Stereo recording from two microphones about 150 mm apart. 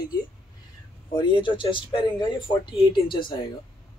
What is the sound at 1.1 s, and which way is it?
Speech, 35° left (ahead or behind).